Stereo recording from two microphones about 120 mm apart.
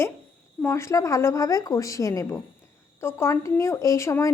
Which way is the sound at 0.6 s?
25° left (ahead or behind).